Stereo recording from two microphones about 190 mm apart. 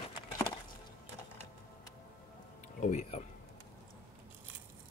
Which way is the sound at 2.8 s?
35° left (ahead or behind).